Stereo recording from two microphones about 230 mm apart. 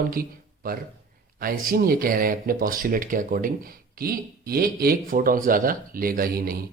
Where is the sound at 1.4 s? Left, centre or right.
Right.